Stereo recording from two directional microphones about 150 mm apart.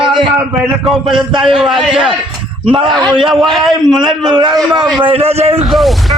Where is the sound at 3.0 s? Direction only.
30° right (ahead or behind).